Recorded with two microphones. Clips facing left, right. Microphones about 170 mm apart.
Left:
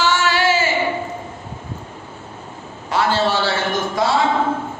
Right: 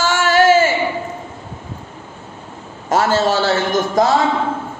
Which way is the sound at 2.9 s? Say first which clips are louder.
Right 3 dB; 45° right (ahead or behind).